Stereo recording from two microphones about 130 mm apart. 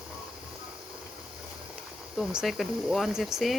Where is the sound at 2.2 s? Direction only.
Centre (ahead or behind).